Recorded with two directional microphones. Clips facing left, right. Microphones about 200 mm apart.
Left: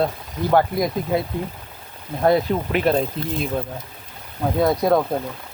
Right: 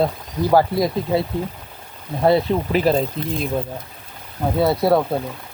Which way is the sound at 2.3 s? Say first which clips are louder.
Right 2 dB; 30° right (ahead or behind).